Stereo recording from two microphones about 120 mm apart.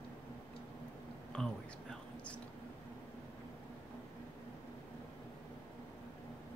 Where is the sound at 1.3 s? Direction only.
10° left (ahead or behind).